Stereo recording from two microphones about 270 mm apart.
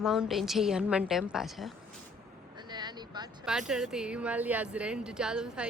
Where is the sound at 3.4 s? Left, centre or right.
Centre.